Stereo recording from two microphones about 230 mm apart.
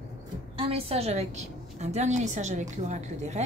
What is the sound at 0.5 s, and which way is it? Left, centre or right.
Speech, right.